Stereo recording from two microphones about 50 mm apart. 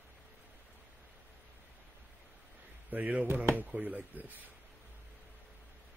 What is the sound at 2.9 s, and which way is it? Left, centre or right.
Speech, right.